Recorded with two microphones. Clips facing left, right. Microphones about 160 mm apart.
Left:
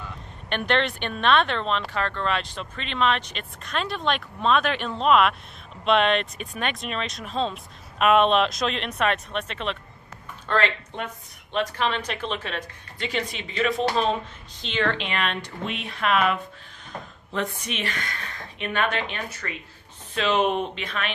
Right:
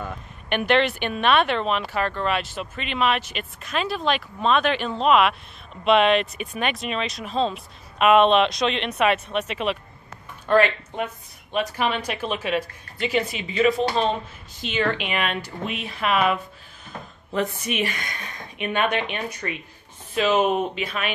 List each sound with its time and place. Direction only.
0.5 s speech: 5° right (ahead or behind)
20.2 s speech: 5° right (ahead or behind)